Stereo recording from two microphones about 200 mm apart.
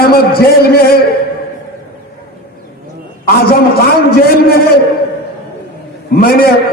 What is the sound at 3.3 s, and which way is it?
A man's voice, 50° left (ahead or behind).